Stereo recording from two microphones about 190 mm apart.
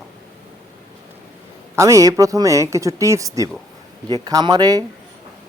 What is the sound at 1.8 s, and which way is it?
A man's voice, 15° right (ahead or behind).